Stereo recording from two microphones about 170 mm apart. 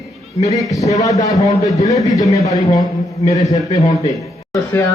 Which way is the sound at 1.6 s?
20° left (ahead or behind).